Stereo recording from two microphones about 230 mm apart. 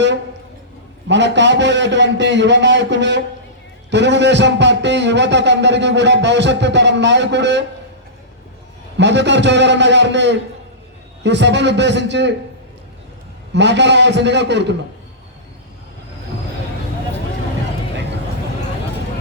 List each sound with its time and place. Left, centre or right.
1.0 s a man's voice: right
9.0 s a man's voice: right
13.5 s a man's voice: right